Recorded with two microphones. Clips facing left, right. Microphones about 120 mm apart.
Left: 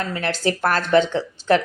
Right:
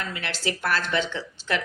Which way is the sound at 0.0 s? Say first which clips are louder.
Left 8 dB; 40° left (ahead or behind).